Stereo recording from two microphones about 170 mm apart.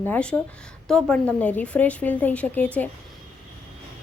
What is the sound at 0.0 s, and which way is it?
A woman's voice, 10° left (ahead or behind).